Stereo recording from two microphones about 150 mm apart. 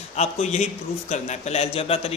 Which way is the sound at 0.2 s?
45° left (ahead or behind).